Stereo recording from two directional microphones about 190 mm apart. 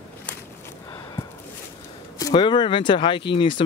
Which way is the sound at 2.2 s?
20° left (ahead or behind).